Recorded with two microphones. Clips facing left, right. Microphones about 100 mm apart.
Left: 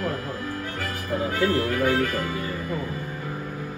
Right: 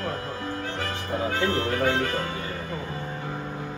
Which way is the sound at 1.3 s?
25° right (ahead or behind).